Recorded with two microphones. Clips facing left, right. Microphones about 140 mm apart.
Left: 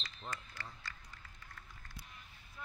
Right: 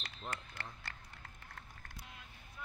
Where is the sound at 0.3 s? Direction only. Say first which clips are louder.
Right 1 dB; 60° right (ahead or behind).